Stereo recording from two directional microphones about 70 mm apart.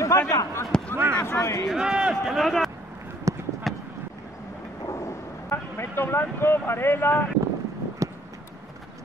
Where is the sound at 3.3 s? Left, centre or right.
Right.